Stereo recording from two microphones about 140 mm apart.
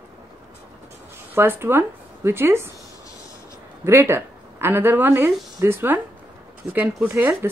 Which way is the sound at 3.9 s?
20° right (ahead or behind).